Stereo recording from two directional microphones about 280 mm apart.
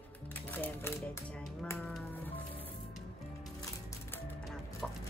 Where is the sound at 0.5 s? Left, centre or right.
Centre.